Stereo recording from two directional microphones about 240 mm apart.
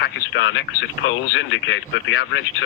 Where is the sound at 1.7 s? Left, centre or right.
Left.